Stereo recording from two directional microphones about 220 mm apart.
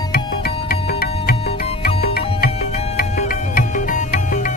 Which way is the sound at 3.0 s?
40° left (ahead or behind).